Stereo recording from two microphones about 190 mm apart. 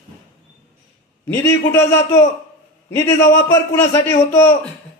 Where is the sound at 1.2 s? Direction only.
10° left (ahead or behind).